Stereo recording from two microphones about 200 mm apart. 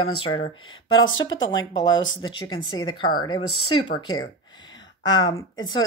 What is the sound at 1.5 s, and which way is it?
Speech, 20° left (ahead or behind).